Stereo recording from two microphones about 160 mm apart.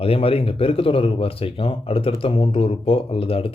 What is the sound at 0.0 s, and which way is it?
Speech, 35° left (ahead or behind).